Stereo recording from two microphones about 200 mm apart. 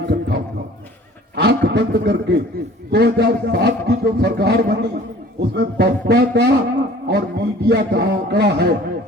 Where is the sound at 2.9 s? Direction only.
55° right (ahead or behind).